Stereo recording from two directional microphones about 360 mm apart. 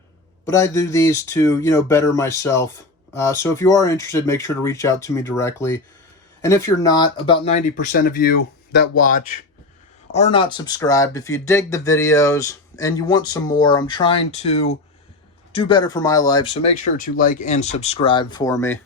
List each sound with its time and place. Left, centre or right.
0.4 s speech: centre